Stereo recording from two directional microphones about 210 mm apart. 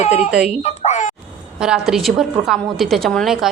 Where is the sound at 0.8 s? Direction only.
35° left (ahead or behind).